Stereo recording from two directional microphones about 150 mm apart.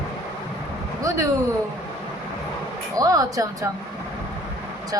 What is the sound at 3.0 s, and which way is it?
Speech, 25° right (ahead or behind).